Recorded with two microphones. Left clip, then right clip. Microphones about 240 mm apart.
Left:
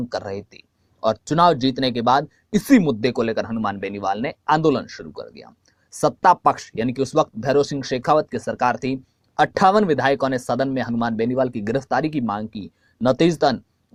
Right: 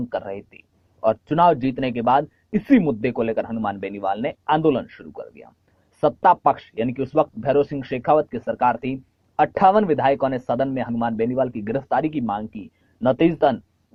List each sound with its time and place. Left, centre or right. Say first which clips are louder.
0.1 s speech: even; left